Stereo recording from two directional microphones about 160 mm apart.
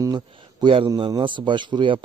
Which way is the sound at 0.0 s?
25° right (ahead or behind).